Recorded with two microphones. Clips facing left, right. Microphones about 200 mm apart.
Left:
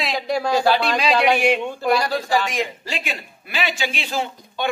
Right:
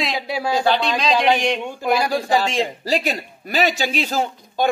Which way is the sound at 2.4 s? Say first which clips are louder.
Right 4 dB; 30° right (ahead or behind).